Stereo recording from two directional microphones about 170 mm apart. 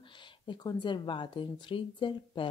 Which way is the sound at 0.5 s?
25° left (ahead or behind).